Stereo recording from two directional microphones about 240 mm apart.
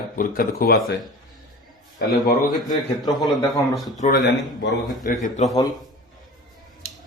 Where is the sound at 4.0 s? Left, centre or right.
Left.